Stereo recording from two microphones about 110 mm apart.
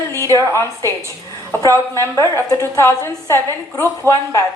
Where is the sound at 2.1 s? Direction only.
30° left (ahead or behind).